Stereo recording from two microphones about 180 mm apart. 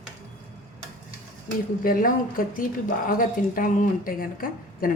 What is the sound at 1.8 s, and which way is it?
A woman's voice, 50° left (ahead or behind).